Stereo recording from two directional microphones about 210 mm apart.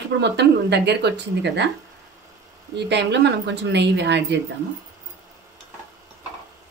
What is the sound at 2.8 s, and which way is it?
Speech, 55° right (ahead or behind).